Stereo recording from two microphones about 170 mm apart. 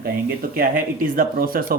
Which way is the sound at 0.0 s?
65° right (ahead or behind).